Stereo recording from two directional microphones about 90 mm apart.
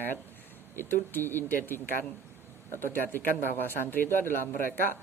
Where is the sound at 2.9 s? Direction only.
20° left (ahead or behind).